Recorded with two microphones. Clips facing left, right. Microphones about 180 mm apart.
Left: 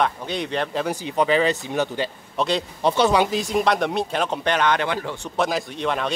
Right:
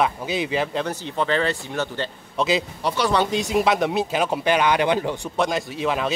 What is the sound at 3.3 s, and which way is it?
Speech, centre (ahead or behind).